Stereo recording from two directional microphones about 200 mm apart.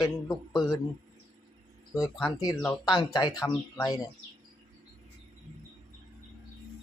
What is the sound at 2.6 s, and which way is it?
Speech, 20° left (ahead or behind).